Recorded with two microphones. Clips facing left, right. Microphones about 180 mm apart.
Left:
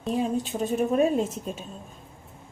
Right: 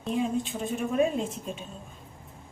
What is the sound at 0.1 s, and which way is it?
A woman's voice, 40° left (ahead or behind).